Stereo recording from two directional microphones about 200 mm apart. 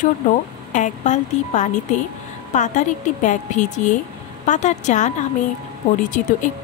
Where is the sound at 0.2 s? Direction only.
40° left (ahead or behind).